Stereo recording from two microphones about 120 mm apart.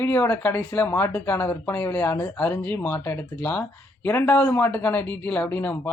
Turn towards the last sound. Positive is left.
turn(degrees=15)  # may be behind; listen again after turning